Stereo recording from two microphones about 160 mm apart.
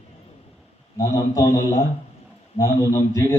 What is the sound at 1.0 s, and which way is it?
A man's voice, 20° left (ahead or behind).